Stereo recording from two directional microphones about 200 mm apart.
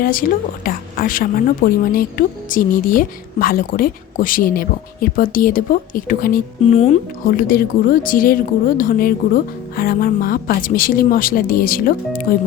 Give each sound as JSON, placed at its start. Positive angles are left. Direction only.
{"t": 0.0, "sound": "speech", "side_deg": 45}